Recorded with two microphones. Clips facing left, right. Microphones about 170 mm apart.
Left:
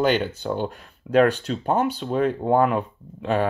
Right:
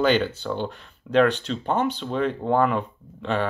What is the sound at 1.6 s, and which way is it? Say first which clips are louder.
Speech: left 2 dB; 10° left (ahead or behind).